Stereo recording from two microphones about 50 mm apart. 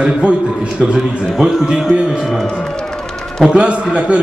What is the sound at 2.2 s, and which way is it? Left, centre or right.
Speech, centre.